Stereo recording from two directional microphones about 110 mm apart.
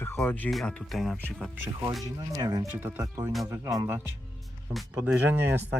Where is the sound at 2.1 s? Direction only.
40° right (ahead or behind).